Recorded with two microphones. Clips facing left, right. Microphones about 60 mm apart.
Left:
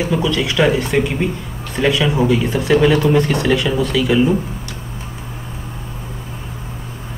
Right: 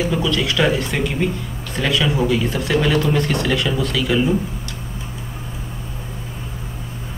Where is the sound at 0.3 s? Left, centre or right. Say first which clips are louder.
Left 3 dB; centre.